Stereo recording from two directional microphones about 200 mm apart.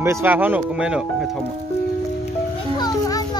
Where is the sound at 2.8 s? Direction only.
20° left (ahead or behind).